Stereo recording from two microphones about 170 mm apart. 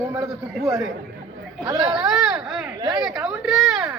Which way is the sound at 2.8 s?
25° right (ahead or behind).